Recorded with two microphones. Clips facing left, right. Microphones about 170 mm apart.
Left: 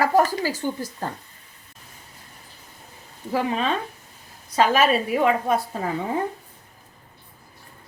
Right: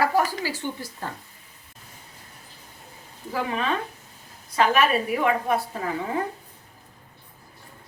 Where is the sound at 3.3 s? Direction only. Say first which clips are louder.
Left 4 dB; 30° left (ahead or behind).